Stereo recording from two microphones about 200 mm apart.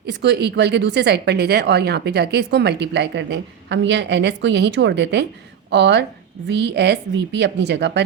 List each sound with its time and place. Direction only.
0.1 s speech: 60° right (ahead or behind)